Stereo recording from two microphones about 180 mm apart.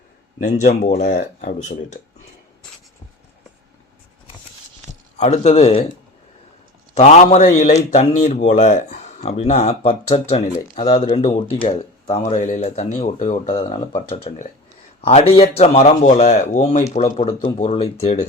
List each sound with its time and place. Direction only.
0.3 s speech: 45° left (ahead or behind)
5.1 s speech: 40° left (ahead or behind)
6.9 s speech: 35° left (ahead or behind)